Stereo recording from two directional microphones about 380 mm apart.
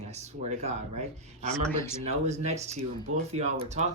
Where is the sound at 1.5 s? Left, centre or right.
Centre.